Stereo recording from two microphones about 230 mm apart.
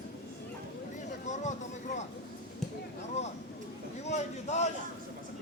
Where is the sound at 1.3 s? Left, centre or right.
Left.